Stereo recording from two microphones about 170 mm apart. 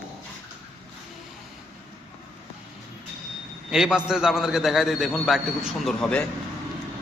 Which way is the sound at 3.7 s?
5° right (ahead or behind).